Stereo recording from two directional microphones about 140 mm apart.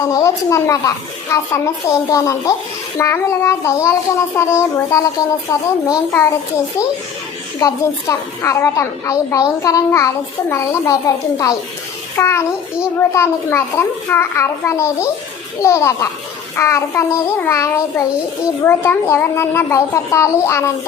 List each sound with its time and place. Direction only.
0.1 s a woman's voice: 20° left (ahead or behind)
7.6 s a woman's voice: 20° left (ahead or behind)